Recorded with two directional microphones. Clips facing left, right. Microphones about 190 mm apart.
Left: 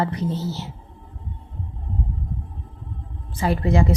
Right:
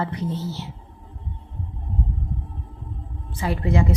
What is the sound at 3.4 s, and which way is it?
Speech, 40° left (ahead or behind).